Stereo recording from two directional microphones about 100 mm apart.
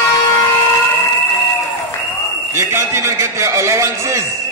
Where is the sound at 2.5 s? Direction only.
25° right (ahead or behind).